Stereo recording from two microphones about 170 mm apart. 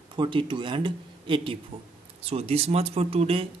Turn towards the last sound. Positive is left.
turn(degrees=-35)  # may be behind; listen again after turning